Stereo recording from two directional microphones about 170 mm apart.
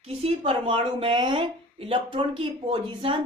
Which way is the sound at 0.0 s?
35° right (ahead or behind).